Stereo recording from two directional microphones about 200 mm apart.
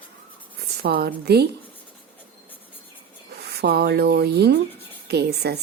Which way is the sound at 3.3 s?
55° right (ahead or behind).